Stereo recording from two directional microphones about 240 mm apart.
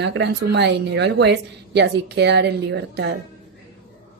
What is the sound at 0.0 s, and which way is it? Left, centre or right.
Speech, right.